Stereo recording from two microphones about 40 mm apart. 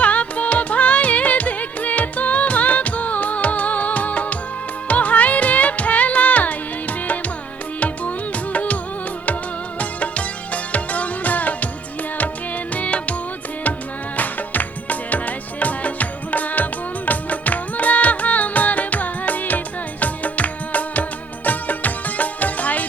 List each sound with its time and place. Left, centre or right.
0.0 s music: left
8.5 s music: left
12.7 s music: left
14.2 s music: left